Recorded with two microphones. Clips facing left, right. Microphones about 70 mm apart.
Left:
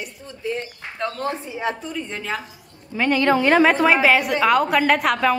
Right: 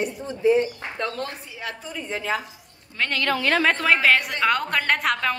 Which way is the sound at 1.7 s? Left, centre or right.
Centre.